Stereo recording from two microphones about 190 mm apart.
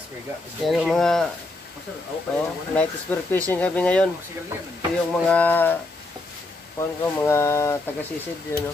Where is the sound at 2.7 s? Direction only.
10° left (ahead or behind).